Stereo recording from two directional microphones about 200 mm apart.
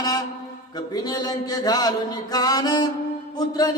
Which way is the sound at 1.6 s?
20° left (ahead or behind).